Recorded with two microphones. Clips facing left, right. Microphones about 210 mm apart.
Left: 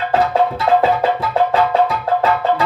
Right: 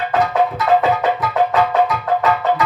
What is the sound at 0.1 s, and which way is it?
Music, 30° left (ahead or behind).